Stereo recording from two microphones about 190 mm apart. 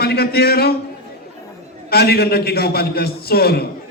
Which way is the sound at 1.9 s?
55° left (ahead or behind).